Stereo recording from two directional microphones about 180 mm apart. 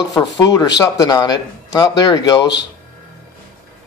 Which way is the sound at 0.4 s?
25° left (ahead or behind).